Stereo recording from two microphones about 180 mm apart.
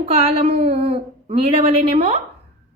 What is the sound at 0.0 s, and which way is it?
A woman's voice, 35° right (ahead or behind).